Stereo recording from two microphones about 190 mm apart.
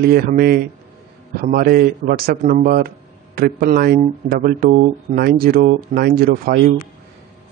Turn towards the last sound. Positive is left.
turn(degrees=-50)  # may be behind; listen again after turning